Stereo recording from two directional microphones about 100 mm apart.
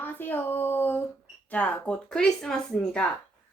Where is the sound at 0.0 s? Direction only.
20° left (ahead or behind).